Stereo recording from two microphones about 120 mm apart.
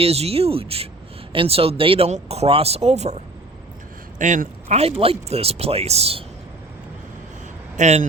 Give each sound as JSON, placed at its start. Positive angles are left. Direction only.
{"t": 0.0, "sound": "speech", "side_deg": -60}
{"t": 2.0, "sound": "speech", "side_deg": -65}
{"t": 7.8, "sound": "speech", "side_deg": -75}